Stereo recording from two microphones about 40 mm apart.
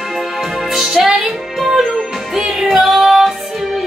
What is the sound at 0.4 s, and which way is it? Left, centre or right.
Music, centre.